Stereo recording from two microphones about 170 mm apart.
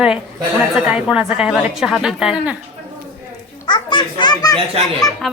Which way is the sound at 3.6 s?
25° left (ahead or behind).